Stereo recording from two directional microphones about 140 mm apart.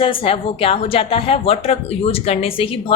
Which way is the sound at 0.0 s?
40° left (ahead or behind).